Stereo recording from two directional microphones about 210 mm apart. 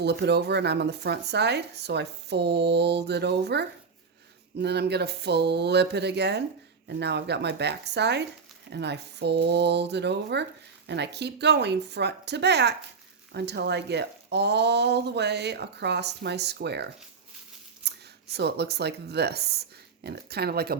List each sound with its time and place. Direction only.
0.0 s speech: 55° right (ahead or behind)